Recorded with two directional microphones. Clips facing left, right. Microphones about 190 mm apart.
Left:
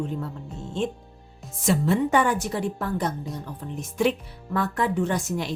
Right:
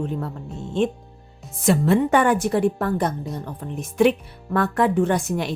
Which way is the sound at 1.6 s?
60° right (ahead or behind).